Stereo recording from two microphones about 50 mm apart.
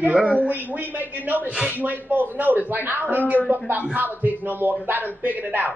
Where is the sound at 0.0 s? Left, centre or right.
Right.